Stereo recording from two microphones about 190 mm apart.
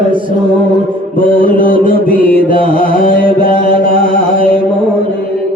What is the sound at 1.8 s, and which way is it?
Chant, 45° left (ahead or behind).